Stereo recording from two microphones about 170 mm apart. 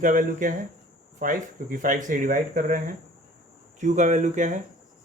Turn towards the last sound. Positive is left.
turn(degrees=-45)  # may be behind; listen again after turning